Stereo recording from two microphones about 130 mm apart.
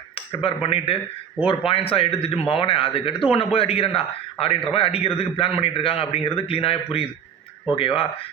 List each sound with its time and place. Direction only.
0.3 s a man's voice: 45° left (ahead or behind)